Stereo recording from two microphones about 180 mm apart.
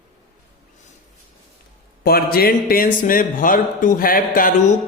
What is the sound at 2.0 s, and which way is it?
A man's voice, 60° left (ahead or behind).